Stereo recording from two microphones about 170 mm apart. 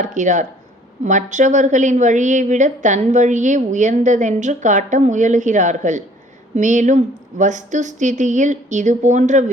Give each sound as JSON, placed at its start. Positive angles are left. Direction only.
{"t": 0.0, "sound": "a woman's voice", "side_deg": -45}